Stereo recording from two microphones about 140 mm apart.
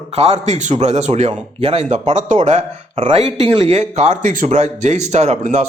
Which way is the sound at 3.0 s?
40° right (ahead or behind).